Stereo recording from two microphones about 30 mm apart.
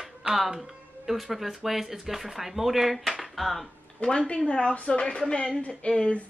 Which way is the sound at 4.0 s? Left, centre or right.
Left.